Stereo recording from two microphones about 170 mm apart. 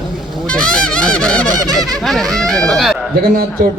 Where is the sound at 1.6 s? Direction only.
20° right (ahead or behind).